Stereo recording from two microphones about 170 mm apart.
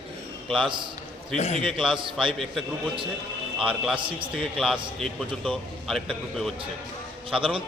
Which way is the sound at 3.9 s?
30° right (ahead or behind).